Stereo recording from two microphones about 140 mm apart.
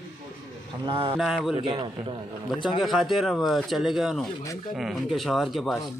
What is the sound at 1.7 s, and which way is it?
Speech, 35° right (ahead or behind).